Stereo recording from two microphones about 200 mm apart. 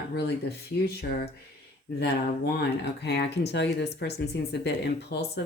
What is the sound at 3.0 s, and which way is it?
Speech, 55° left (ahead or behind).